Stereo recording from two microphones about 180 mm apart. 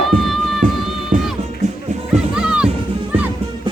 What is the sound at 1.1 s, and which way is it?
Music, 50° right (ahead or behind).